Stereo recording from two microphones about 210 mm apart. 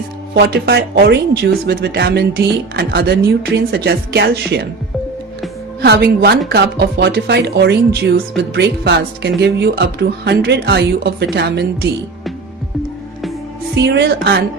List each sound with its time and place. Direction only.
0.3 s speech: 55° right (ahead or behind)
5.8 s speech: 50° right (ahead or behind)
13.8 s speech: 55° right (ahead or behind)